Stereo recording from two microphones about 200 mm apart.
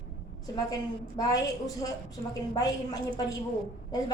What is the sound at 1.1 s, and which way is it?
A woman's voice, 20° left (ahead or behind).